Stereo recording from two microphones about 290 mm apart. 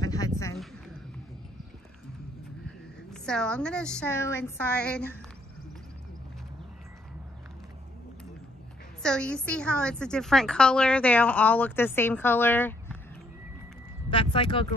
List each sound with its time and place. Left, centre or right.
0.0 s a sound: centre
3.1 s a woman's voice: centre
9.0 s a woman's voice: centre
14.1 s speech: centre